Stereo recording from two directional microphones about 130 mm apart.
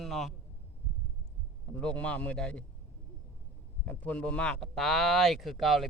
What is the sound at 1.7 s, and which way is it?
Speech, 10° left (ahead or behind).